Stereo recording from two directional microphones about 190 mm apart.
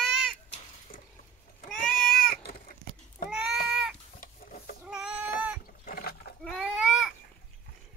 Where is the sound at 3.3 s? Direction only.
Centre (ahead or behind).